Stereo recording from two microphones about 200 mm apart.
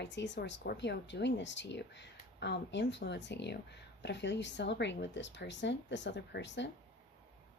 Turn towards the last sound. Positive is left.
turn(degrees=65)  # may be behind; listen again after turning